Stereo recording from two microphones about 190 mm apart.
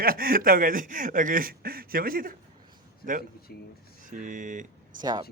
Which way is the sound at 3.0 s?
50° left (ahead or behind).